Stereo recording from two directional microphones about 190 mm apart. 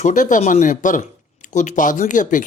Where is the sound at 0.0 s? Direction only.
40° left (ahead or behind).